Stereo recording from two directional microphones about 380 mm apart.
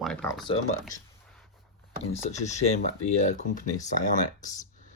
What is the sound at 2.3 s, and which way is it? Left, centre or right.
Speech, centre.